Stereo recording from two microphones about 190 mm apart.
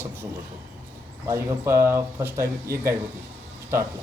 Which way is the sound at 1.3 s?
15° right (ahead or behind).